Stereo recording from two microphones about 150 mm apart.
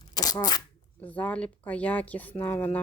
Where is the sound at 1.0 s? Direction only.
10° left (ahead or behind).